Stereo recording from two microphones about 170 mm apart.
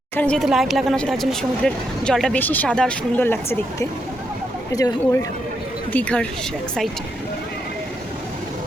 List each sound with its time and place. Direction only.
0.2 s speech: 5° left (ahead or behind); by 5.2 s 20° left (ahead or behind)
5.9 s speech: 10° left (ahead or behind)